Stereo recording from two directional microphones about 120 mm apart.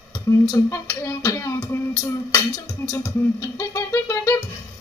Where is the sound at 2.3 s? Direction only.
30° left (ahead or behind).